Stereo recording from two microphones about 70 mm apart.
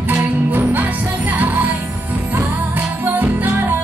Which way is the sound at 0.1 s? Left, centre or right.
Right.